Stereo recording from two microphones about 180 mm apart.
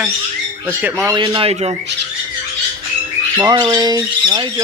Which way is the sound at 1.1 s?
30° right (ahead or behind).